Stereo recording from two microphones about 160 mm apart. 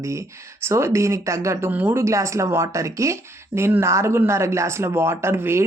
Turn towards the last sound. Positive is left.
turn(degrees=-15)  # may be behind; listen again after turning